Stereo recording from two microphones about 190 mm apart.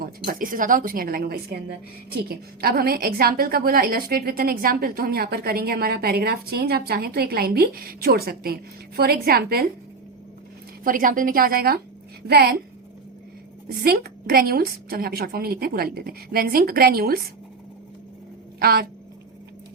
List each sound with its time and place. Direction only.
0.3 s a woman's voice: 45° right (ahead or behind)
10.8 s a woman's voice: 45° right (ahead or behind)
13.7 s a woman's voice: 55° right (ahead or behind)
18.6 s a woman's voice: 55° right (ahead or behind)